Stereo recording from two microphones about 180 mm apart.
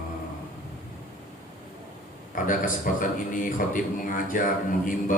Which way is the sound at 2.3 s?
50° left (ahead or behind).